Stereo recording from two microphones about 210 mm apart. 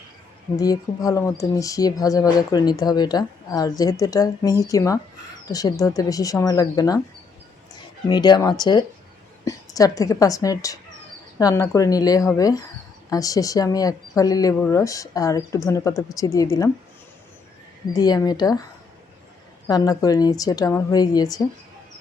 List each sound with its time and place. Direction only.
0.5 s speech: 15° left (ahead or behind)
8.0 s a woman's voice: 20° left (ahead or behind)
17.9 s speech: 20° left (ahead or behind)
19.6 s speech: 20° left (ahead or behind)